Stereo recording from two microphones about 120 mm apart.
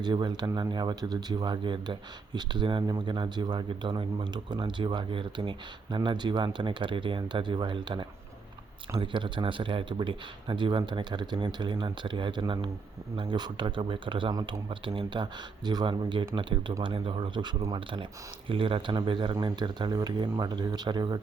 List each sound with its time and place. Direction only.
0.0 s speech: 40° right (ahead or behind)